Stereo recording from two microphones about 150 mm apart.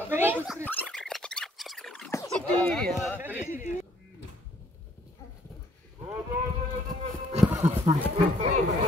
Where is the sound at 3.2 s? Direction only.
15° right (ahead or behind).